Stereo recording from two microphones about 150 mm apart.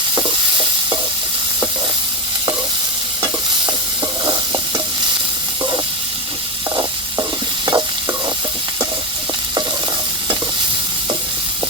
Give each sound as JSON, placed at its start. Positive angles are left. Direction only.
{"t": 0.2, "sound": "stir", "side_deg": -30}
{"t": 6.7, "sound": "stir", "side_deg": -25}